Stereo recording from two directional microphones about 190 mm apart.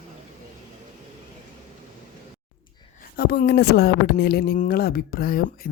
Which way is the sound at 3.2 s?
55° left (ahead or behind).